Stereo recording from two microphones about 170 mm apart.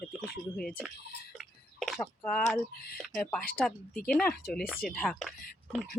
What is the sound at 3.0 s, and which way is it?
Speech, 5° left (ahead or behind).